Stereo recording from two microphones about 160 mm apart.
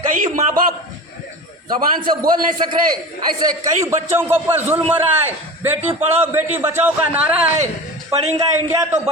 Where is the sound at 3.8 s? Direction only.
15° right (ahead or behind).